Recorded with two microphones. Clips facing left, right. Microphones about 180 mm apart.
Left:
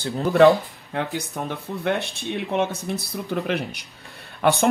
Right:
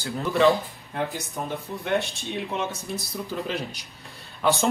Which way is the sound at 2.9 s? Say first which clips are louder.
Left 3 dB; 60° left (ahead or behind).